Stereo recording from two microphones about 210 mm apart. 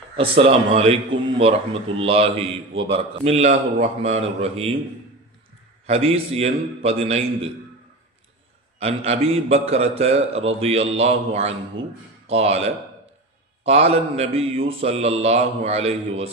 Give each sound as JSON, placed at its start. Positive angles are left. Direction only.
{"t": 0.2, "sound": "a man's voice", "side_deg": -25}
{"t": 5.8, "sound": "a man's voice", "side_deg": -30}
{"t": 8.8, "sound": "a man's voice", "side_deg": -30}